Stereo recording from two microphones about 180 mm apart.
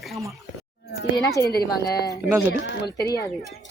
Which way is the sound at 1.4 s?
15° left (ahead or behind).